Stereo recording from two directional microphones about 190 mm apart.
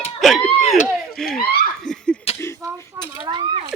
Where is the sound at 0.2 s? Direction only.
Centre (ahead or behind).